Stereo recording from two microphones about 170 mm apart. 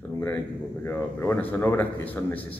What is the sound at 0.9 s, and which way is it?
Speech, 15° left (ahead or behind).